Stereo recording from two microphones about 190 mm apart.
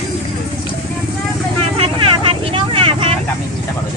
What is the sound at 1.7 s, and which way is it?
Vehicle, 30° right (ahead or behind).